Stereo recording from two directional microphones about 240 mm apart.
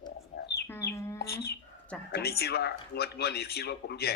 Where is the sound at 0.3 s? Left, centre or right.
Left.